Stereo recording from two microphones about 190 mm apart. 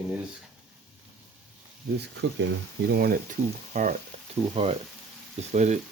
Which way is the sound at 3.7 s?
40° right (ahead or behind).